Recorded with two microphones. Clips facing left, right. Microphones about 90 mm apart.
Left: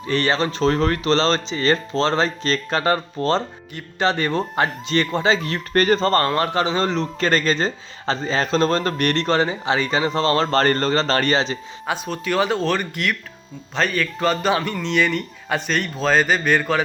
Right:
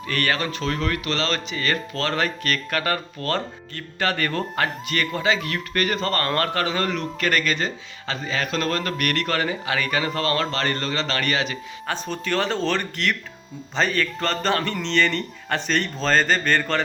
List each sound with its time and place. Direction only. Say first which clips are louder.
0.1 s speech: left 4 dB; 25° left (ahead or behind)
6.2 s speech: left 3 dB; 15° left (ahead or behind); by 11.5 s 30° left (ahead or behind)
11.9 s a man's voice: left 3 dB; 5° left (ahead or behind)